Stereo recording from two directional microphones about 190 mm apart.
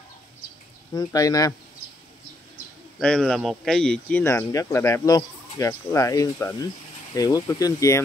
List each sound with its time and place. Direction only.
0.9 s speech: 20° left (ahead or behind)
3.0 s speech: 5° left (ahead or behind)